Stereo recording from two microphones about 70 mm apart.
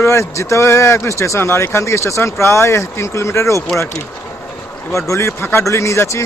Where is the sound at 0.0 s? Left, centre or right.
Left.